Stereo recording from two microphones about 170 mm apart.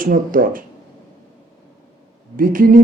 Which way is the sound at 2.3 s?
55° right (ahead or behind).